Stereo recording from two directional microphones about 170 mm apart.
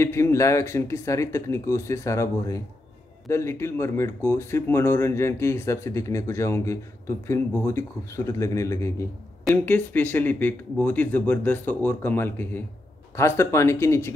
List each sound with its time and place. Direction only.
0.0 s speech: 15° left (ahead or behind)
9.4 s speech: 5° left (ahead or behind)